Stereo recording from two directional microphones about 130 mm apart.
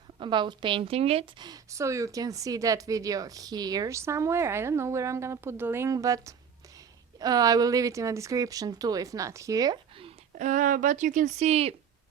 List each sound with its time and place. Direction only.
0.2 s a woman's voice: 35° right (ahead or behind)
1.4 s speech: 25° right (ahead or behind)
10.3 s speech: 70° right (ahead or behind); by 11.7 s 55° right (ahead or behind)